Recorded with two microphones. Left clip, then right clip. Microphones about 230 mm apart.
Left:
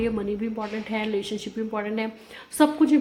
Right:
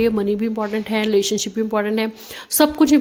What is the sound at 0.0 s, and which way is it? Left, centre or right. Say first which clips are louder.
A woman's voice: right 8 dB; right.